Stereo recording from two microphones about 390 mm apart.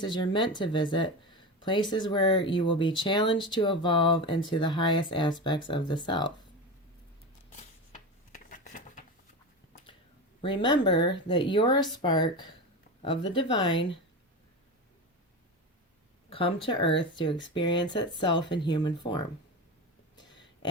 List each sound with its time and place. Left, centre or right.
0.0 s speech: centre
8.4 s a sound: centre
10.4 s speech: centre
16.3 s speech: centre